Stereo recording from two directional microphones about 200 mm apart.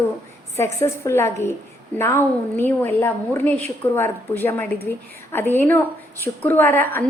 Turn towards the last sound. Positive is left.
turn(degrees=10)  # may be behind; listen again after turning